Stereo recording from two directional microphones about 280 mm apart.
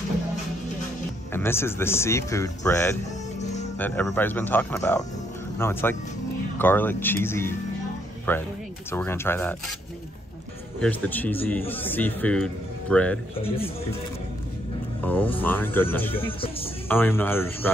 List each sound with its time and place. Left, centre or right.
1.3 s a man's voice: centre
10.8 s a man's voice: centre
15.0 s a man's voice: centre
16.3 s speech: centre
16.8 s a man's voice: centre